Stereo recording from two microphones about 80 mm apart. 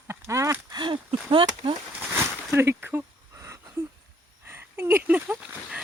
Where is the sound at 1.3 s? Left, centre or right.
Right.